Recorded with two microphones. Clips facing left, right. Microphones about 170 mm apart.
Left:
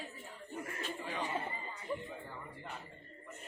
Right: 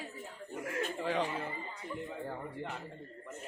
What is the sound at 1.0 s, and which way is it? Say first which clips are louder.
Speech: right 8 dB; 90° right.